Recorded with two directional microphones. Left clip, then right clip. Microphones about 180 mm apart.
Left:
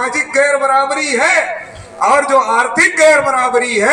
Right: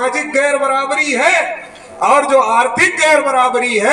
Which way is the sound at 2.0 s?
50° left (ahead or behind).